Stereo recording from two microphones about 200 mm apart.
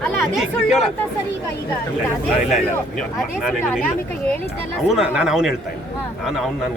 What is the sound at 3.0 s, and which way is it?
Speech, centre (ahead or behind).